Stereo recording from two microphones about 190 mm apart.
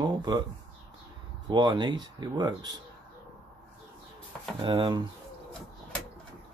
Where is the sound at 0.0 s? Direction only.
20° right (ahead or behind).